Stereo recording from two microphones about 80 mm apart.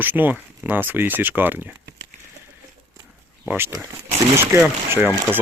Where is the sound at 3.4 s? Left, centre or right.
Right.